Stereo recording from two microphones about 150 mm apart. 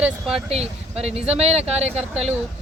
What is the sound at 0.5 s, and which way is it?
Speech, 45° right (ahead or behind).